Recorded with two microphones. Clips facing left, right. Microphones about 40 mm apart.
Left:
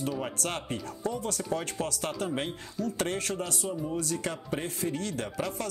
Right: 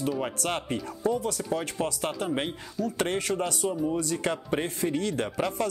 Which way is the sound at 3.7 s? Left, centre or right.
Centre.